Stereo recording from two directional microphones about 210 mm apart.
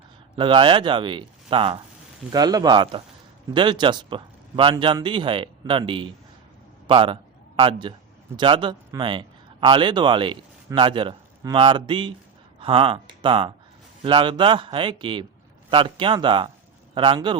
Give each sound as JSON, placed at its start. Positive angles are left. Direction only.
{"t": 0.3, "sound": "a man's voice", "side_deg": -25}